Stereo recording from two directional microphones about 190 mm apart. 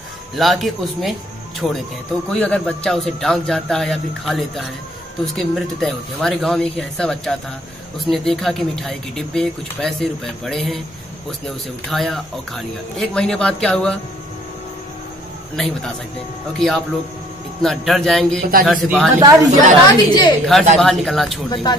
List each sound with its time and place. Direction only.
0.4 s speech: centre (ahead or behind)
11.9 s speech: centre (ahead or behind)
15.5 s speech: centre (ahead or behind)
19.1 s speech: 20° right (ahead or behind)
19.9 s a woman's voice: 20° left (ahead or behind)
20.7 s speech: centre (ahead or behind)